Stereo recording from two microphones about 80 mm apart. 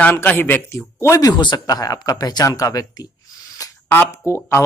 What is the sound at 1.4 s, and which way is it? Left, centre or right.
Speech, left.